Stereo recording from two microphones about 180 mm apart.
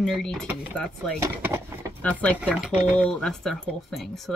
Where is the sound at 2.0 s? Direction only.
10° left (ahead or behind).